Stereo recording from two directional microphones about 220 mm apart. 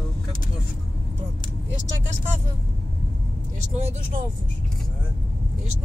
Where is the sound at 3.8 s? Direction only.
30° right (ahead or behind).